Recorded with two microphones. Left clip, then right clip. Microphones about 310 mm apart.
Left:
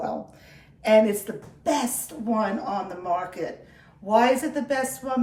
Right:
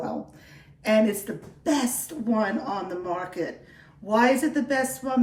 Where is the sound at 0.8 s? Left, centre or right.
Centre.